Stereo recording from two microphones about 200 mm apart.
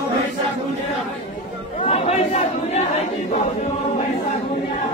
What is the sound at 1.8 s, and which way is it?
Chatter, 30° left (ahead or behind).